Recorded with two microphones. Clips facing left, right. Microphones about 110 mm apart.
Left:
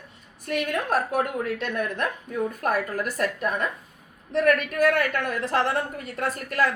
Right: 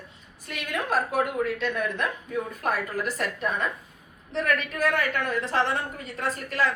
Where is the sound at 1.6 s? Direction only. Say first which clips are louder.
Even; 50° left (ahead or behind).